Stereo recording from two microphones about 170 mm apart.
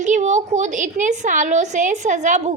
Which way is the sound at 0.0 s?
45° right (ahead or behind).